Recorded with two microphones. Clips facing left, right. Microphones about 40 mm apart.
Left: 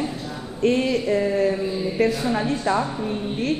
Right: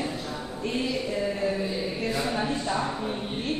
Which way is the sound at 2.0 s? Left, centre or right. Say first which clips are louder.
Left 13 dB; left.